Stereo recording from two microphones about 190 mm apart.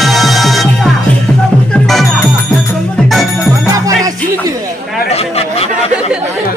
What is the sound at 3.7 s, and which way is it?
Music, 20° right (ahead or behind).